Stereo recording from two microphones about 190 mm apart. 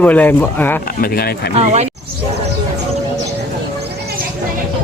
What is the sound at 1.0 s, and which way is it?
Speech, 50° left (ahead or behind).